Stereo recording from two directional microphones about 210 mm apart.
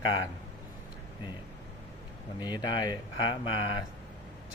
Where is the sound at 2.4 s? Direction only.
20° left (ahead or behind).